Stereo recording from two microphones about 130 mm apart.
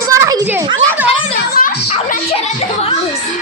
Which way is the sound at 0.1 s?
25° right (ahead or behind).